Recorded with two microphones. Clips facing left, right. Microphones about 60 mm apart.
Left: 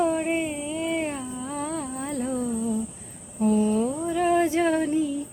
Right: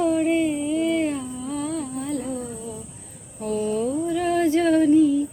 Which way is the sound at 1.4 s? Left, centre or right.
Left.